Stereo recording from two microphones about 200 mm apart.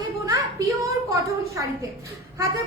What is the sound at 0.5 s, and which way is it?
Speech, 15° right (ahead or behind).